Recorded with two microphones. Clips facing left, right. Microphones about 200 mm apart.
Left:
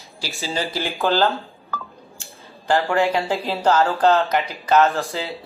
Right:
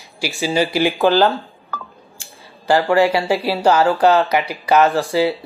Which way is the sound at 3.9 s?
15° right (ahead or behind).